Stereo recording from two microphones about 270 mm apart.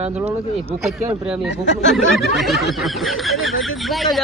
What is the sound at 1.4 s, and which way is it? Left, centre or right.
Speech, left.